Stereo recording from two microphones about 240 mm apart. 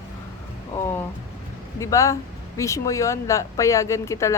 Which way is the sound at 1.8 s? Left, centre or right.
Centre.